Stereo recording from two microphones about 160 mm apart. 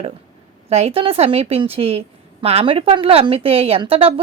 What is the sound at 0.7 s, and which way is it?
A woman's voice, 40° right (ahead or behind).